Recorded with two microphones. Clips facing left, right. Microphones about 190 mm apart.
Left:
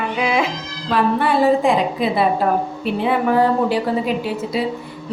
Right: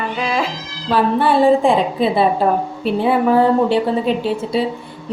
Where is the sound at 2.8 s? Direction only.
30° right (ahead or behind).